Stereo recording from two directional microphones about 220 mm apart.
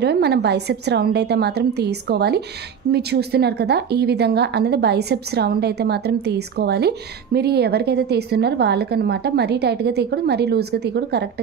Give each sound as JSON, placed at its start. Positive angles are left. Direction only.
{"t": 0.0, "sound": "a woman's voice", "side_deg": -50}